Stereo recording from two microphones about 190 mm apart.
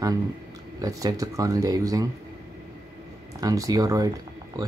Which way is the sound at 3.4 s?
20° right (ahead or behind).